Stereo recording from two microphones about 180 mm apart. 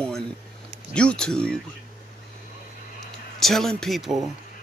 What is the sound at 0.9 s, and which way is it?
Speech, 5° left (ahead or behind).